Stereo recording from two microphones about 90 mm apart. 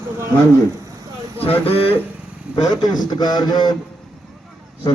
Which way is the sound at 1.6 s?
90° left.